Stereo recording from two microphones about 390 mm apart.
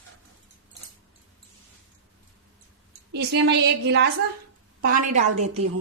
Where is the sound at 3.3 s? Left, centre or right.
Right.